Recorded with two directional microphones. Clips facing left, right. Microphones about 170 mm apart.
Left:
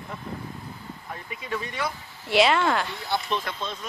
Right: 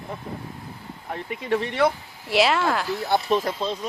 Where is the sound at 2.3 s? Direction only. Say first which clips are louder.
Even; centre (ahead or behind).